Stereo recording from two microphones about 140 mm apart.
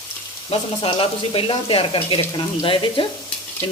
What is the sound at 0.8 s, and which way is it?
Speech, 40° left (ahead or behind).